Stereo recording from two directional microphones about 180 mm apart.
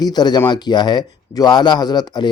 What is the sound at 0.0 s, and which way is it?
Speech, 25° left (ahead or behind).